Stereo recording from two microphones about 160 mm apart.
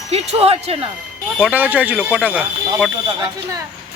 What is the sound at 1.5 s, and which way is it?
Speech, 10° right (ahead or behind).